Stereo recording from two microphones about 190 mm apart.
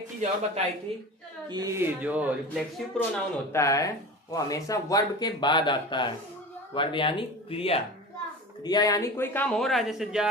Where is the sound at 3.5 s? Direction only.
15° left (ahead or behind).